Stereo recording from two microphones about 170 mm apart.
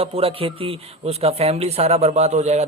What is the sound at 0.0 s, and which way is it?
Speech, 35° right (ahead or behind).